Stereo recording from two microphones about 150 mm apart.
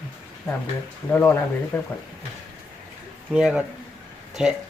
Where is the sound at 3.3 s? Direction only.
5° right (ahead or behind).